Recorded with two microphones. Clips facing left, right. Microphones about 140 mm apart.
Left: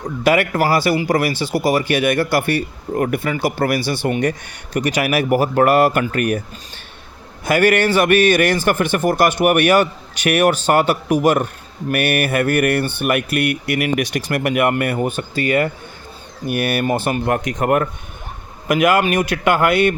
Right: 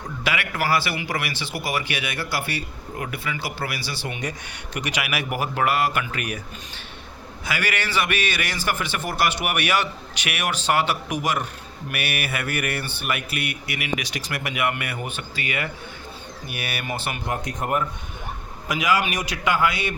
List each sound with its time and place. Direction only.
0.0 s speech: 45° left (ahead or behind)
7.4 s speech: 50° left (ahead or behind)
17.3 s speech: 80° left
18.7 s speech: 55° left (ahead or behind)